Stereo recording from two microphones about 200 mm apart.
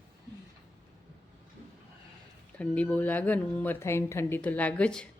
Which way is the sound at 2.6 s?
5° left (ahead or behind).